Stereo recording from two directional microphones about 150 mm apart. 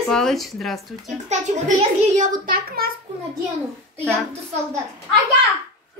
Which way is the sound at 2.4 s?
80° right.